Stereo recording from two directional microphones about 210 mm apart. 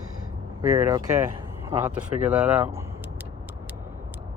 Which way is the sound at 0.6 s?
15° right (ahead or behind).